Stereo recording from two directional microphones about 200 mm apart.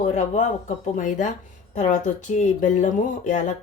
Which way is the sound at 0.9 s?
40° left (ahead or behind).